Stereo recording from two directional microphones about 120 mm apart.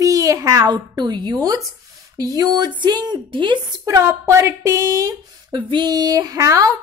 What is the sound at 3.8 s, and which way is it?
A woman's voice, 25° right (ahead or behind).